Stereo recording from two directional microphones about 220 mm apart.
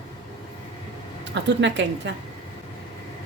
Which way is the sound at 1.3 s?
55° right (ahead or behind).